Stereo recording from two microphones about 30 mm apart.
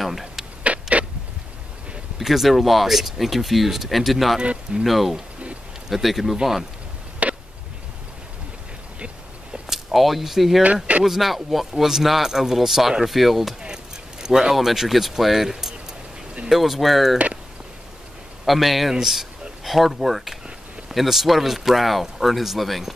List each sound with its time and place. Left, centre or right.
0.7 s vehicle: right
2.1 s speech: centre
7.2 s a sound: right
9.7 s speech: centre
10.6 s speech: right
11.1 s speech: centre
14.2 s speech: centre
18.4 s speech: centre